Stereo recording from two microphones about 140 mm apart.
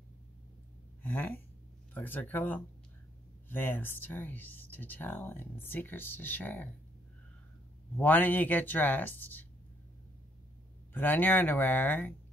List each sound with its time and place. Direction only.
1.0 s speech: 15° left (ahead or behind)
8.0 s speech: 10° left (ahead or behind)
10.9 s speech: 15° left (ahead or behind)